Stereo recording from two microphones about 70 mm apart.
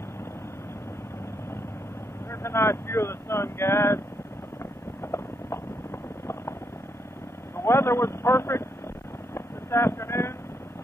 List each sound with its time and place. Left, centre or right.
2.4 s speech: left
5.0 s clip-clop: left
7.5 s a man's voice: left
9.3 s vehicle: left